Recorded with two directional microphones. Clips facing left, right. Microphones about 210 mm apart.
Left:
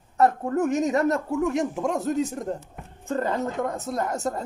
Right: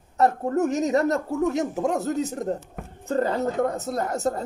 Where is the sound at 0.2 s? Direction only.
35° right (ahead or behind).